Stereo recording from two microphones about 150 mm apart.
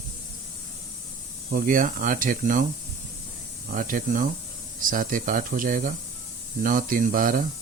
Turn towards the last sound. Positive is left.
turn(degrees=-65)  # may be behind; listen again after turning